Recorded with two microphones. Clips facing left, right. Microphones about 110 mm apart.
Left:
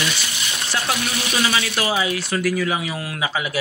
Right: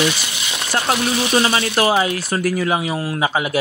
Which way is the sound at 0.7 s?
45° right (ahead or behind).